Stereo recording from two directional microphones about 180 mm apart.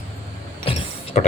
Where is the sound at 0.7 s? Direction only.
40° left (ahead or behind).